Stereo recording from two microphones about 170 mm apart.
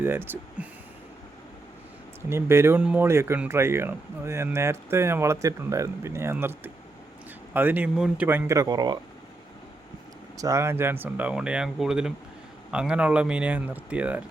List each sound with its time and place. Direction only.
0.0 s speech: 10° right (ahead or behind)
2.3 s speech: 15° right (ahead or behind)
10.3 s speech: 20° right (ahead or behind)